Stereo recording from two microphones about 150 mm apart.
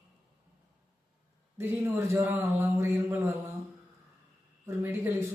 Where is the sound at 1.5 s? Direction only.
15° right (ahead or behind).